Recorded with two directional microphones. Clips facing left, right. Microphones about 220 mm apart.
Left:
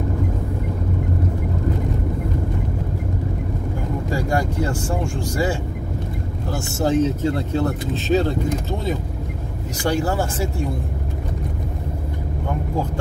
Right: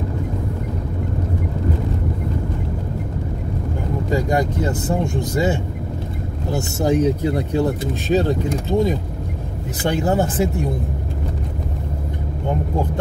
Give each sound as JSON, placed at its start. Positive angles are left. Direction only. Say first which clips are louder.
{"t": 4.1, "sound": "speech", "louder": "right 4 dB", "side_deg": -20}
{"t": 6.8, "sound": "speech", "louder": "right 1 dB", "side_deg": -15}